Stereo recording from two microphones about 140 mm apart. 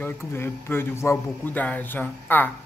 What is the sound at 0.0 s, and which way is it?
A man's voice, 15° left (ahead or behind).